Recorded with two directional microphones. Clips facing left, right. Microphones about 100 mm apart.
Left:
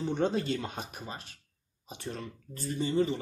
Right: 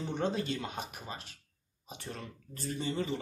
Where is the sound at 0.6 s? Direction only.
35° left (ahead or behind).